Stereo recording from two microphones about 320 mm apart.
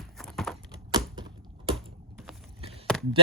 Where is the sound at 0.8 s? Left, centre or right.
Centre.